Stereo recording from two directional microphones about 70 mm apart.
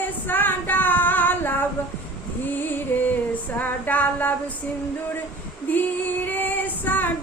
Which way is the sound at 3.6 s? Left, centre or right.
Left.